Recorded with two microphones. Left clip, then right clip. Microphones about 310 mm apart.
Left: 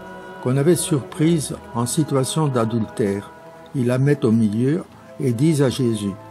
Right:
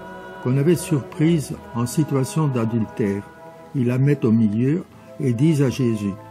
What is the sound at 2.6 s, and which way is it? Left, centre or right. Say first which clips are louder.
A man's voice: left 2 dB; left.